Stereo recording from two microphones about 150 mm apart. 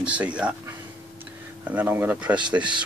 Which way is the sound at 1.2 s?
10° right (ahead or behind).